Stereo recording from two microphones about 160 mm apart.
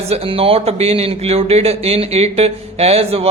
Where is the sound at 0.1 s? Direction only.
35° right (ahead or behind).